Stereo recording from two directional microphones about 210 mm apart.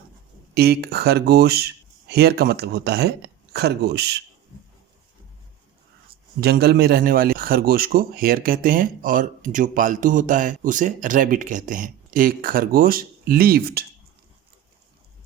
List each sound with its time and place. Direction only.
0.5 s a man's voice: 50° right (ahead or behind)
6.4 s a man's voice: 50° right (ahead or behind)